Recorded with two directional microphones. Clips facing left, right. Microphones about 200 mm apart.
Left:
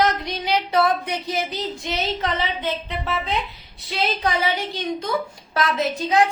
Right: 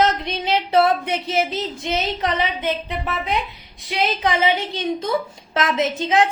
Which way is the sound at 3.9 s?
20° right (ahead or behind).